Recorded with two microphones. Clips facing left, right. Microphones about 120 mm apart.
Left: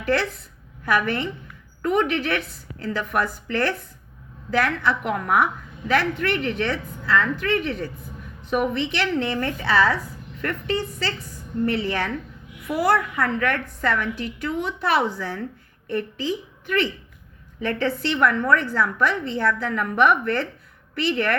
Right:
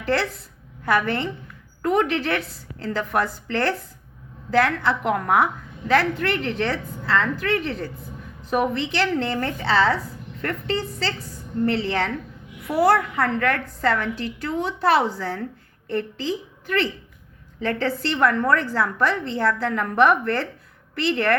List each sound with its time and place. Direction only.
0.0 s a woman's voice: 30° right (ahead or behind)